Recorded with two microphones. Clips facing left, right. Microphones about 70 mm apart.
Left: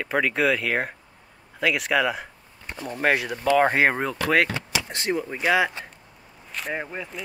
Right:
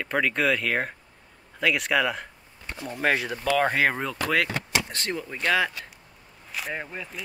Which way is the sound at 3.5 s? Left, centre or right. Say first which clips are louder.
Left 4 dB; centre.